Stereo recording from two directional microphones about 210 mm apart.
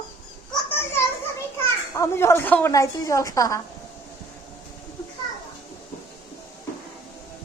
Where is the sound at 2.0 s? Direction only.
15° left (ahead or behind).